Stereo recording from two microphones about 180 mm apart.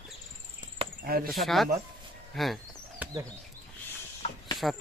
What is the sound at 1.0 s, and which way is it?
Speech, 55° right (ahead or behind).